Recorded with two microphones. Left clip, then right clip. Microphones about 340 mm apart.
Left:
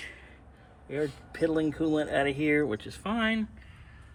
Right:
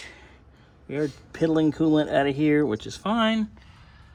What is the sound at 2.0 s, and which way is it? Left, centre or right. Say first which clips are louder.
Speech: right 5 dB; right.